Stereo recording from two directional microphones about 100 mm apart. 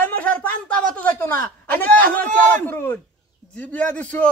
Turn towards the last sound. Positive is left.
turn(degrees=15)  # may be behind; listen again after turning